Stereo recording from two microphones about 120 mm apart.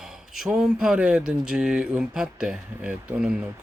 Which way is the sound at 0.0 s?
5° right (ahead or behind).